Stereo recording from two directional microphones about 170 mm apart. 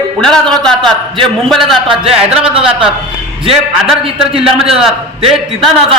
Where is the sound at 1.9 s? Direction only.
35° right (ahead or behind).